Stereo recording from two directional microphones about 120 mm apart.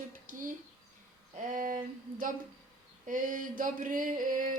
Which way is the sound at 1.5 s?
90° right.